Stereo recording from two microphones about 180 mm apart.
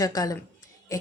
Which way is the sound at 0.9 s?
20° left (ahead or behind).